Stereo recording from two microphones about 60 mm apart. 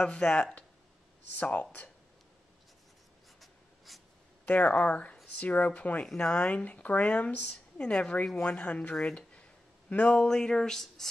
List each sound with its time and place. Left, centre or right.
0.0 s speech: centre
3.3 s writing: centre
4.5 s a woman's voice: left; by 11.1 s centre